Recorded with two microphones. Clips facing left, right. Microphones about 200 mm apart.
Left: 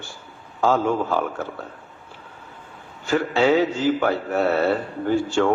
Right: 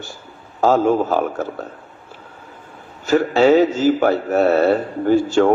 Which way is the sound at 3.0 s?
40° right (ahead or behind).